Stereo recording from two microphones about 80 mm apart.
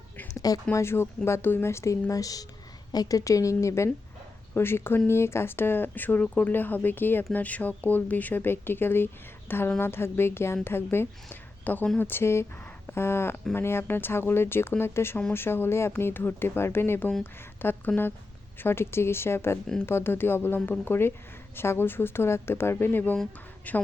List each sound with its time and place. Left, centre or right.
0.3 s speech: left
0.8 s speech: left